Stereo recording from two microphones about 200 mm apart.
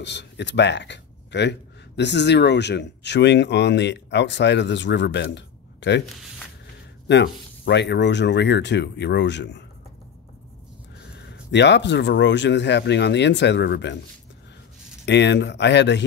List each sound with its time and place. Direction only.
0.0 s speech: 60° left (ahead or behind)
7.1 s speech: 60° left (ahead or behind)
11.0 s a sound: 55° left (ahead or behind)
11.5 s speech: 60° left (ahead or behind)
15.0 s speech: 60° left (ahead or behind)